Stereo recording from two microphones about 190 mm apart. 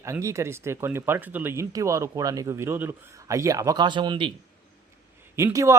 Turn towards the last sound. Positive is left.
turn(degrees=-15)  # may be behind; listen again after turning